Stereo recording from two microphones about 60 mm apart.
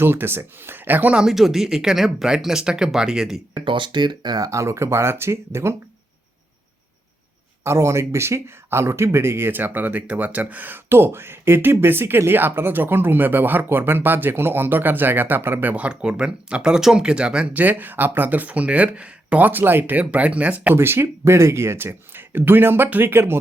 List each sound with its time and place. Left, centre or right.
0.0 s speech: right
1.1 s speech: centre
4.4 s speech: right
7.6 s speech: right
10.8 s speech: right
15.7 s speech: centre
19.5 s speech: right
20.7 s speech: right